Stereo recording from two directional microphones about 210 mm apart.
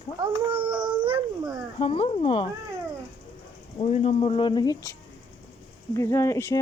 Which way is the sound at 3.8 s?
30° left (ahead or behind).